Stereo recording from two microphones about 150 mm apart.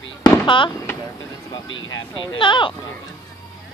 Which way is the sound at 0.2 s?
30° left (ahead or behind).